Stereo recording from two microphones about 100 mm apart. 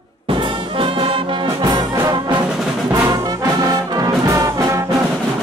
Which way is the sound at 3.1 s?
40° right (ahead or behind).